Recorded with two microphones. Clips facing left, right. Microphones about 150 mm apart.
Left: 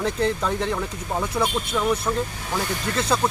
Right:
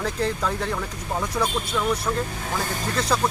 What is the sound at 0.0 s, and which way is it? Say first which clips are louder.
Speech: left 2 dB; centre (ahead or behind).